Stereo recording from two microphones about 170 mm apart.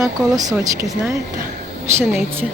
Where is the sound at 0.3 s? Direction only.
20° right (ahead or behind).